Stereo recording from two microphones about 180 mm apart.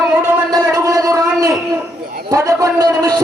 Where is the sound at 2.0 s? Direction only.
55° right (ahead or behind).